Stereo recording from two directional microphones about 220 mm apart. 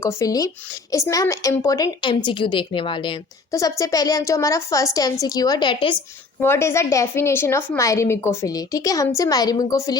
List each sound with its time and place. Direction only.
0.0 s speech: 15° left (ahead or behind)